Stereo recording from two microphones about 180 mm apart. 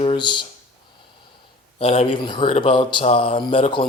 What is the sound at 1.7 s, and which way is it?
Speech, 35° left (ahead or behind).